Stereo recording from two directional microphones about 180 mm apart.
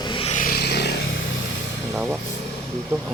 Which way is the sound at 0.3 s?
55° left (ahead or behind).